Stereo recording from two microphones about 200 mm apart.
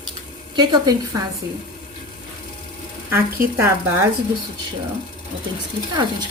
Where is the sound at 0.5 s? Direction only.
20° right (ahead or behind).